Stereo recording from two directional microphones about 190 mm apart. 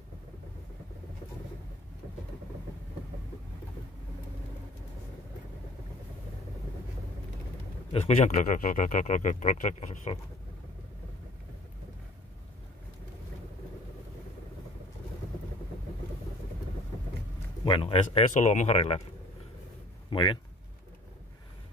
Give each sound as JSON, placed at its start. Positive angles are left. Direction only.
{"t": 7.9, "sound": "speech", "side_deg": 40}
{"t": 17.6, "sound": "speech", "side_deg": 25}
{"t": 20.1, "sound": "speech", "side_deg": 25}